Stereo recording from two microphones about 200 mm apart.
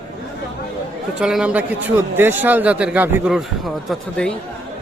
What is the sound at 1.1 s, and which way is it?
A man's voice, 5° right (ahead or behind).